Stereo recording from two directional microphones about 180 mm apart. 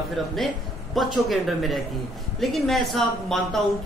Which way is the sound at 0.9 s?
Centre (ahead or behind).